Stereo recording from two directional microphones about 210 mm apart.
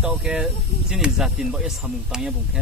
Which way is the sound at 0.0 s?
5° right (ahead or behind).